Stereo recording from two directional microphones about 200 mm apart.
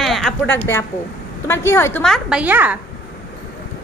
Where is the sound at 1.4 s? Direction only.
10° left (ahead or behind); by 2.7 s 10° right (ahead or behind).